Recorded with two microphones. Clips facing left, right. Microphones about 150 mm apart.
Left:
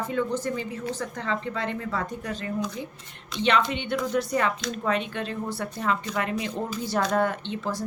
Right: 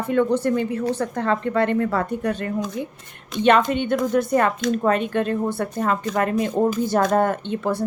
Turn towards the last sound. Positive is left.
turn(degrees=-60)  # may be behind; listen again after turning